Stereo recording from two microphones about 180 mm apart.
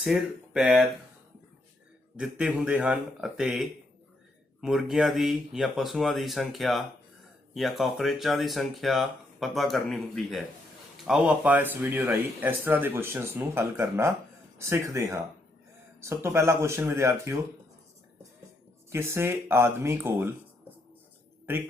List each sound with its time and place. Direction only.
0.0 s speech: 5° right (ahead or behind)
2.1 s speech: 5° right (ahead or behind)
18.9 s speech: 15° right (ahead or behind)